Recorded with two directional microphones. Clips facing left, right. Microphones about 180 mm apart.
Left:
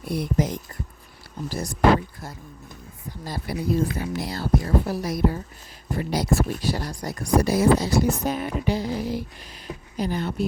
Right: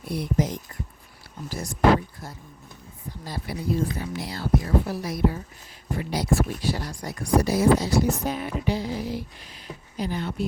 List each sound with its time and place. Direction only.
0.1 s speech: 50° left (ahead or behind)
1.5 s speech: 35° left (ahead or behind)
3.2 s speech: 40° left (ahead or behind)